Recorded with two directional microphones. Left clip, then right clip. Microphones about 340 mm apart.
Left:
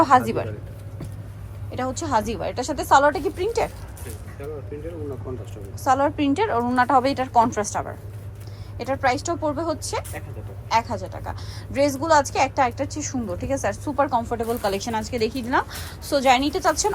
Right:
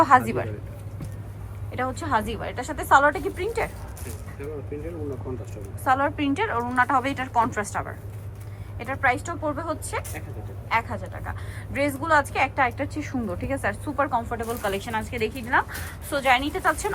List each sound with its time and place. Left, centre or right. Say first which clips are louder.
0.0 s a woman's voice: left 1 dB; centre
1.7 s a woman's voice: left 2 dB; centre
5.8 s a woman's voice: left 2 dB; centre